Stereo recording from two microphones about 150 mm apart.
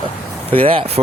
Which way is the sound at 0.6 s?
40° right (ahead or behind).